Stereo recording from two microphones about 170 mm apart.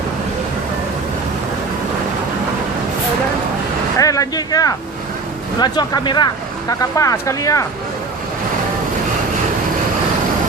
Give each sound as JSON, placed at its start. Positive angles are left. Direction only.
{"t": 3.9, "sound": "vehicle", "side_deg": 20}
{"t": 5.5, "sound": "speech", "side_deg": 25}